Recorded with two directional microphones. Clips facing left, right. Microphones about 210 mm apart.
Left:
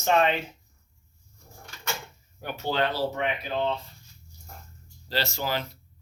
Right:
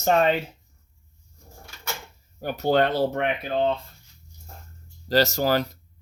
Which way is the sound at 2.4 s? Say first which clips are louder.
Right 7 dB; 40° right (ahead or behind).